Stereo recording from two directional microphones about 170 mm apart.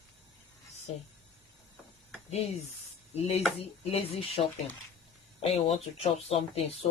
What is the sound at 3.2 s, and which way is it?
Speech, 40° left (ahead or behind).